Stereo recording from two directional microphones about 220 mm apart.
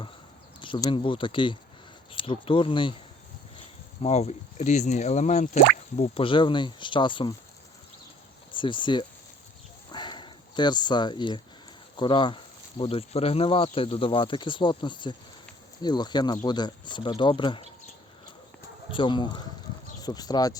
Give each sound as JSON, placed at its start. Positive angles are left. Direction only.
{"t": 0.6, "sound": "speech", "side_deg": 20}
{"t": 4.0, "sound": "speech", "side_deg": 30}
{"t": 8.5, "sound": "speech", "side_deg": 20}
{"t": 9.9, "sound": "dog", "side_deg": 20}
{"t": 11.9, "sound": "speech", "side_deg": 20}
{"t": 18.9, "sound": "speech", "side_deg": 20}